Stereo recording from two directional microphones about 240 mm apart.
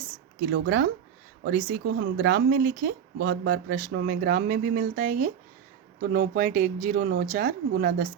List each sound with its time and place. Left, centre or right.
0.5 s speech: right